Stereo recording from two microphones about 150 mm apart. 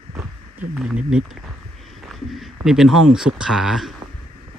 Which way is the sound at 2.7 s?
5° right (ahead or behind).